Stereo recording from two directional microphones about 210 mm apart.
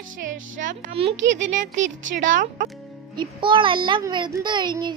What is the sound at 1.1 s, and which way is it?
Speech, 60° right (ahead or behind).